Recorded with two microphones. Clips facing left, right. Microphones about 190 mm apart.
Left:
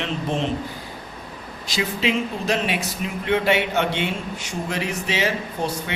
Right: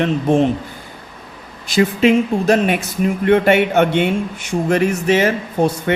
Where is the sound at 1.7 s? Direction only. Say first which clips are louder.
Right 10 dB; 50° right (ahead or behind).